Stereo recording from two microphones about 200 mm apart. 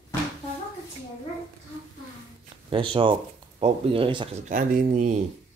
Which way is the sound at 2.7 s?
25° right (ahead or behind).